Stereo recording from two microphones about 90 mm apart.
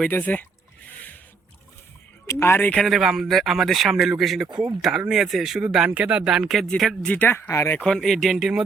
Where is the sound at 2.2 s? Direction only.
30° left (ahead or behind).